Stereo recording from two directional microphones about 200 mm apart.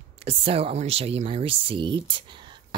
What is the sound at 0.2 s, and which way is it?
Speech, 30° right (ahead or behind).